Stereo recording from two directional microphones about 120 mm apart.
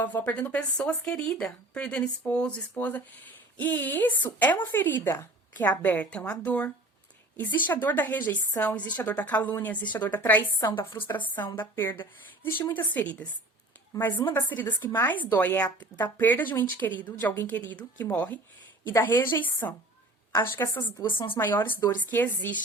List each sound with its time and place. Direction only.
0.0 s speech: 15° left (ahead or behind)
5.5 s speech: 15° left (ahead or behind)
14.3 s speech: 15° left (ahead or behind)
21.0 s speech: 45° left (ahead or behind)
21.3 s speech: 15° left (ahead or behind)